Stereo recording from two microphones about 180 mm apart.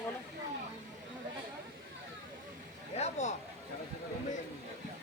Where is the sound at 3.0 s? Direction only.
40° left (ahead or behind).